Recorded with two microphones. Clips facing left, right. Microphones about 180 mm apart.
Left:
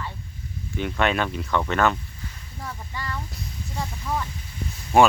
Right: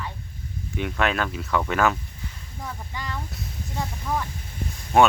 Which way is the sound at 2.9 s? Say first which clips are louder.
Left 3 dB; 20° right (ahead or behind).